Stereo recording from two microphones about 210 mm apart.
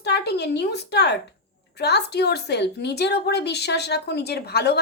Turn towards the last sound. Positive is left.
turn(degrees=50)  # may be behind; listen again after turning